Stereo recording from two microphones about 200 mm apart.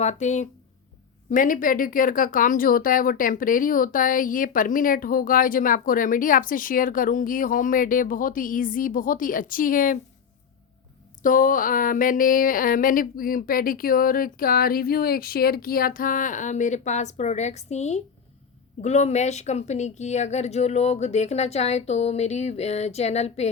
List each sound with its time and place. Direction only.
0.0 s speech: 35° left (ahead or behind)
11.2 s speech: 40° left (ahead or behind)